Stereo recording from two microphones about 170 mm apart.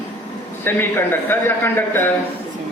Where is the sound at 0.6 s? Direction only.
10° left (ahead or behind).